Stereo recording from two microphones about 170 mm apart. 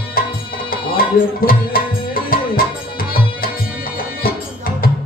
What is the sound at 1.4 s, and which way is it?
Music, 60° left (ahead or behind).